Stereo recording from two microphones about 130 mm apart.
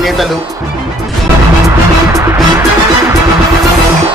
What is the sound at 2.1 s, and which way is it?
Music, 25° right (ahead or behind).